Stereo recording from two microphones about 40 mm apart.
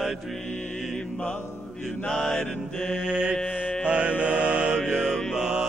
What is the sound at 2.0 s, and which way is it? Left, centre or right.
Mantra, centre.